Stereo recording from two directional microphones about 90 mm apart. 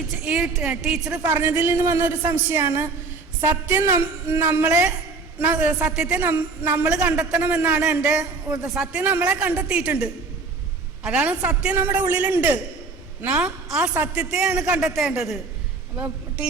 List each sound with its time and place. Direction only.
0.3 s speech: 15° right (ahead or behind)
1.2 s a man's voice: 25° right (ahead or behind)
6.2 s a man's voice: 25° right (ahead or behind)
6.9 s a man's voice: 10° right (ahead or behind)